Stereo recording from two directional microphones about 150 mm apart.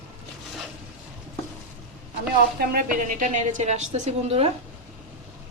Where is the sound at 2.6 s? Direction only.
75° right (ahead or behind); by 4.5 s 45° right (ahead or behind).